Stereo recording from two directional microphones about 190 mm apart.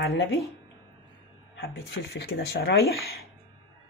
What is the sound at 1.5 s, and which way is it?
Speech, 65° left (ahead or behind).